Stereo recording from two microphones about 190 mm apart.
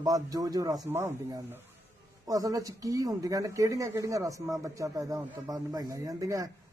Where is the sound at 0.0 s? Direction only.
20° right (ahead or behind).